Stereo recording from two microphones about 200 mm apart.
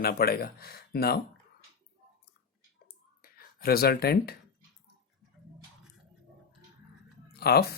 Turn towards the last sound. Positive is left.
turn(degrees=50)  # may be behind; listen again after turning